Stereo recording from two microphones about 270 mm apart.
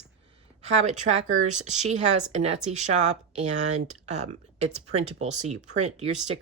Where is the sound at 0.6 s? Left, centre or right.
Right.